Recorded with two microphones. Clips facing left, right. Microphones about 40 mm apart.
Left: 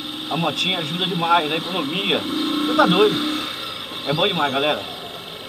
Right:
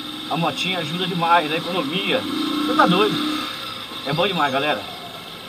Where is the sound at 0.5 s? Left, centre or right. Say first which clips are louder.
Left 1 dB; left.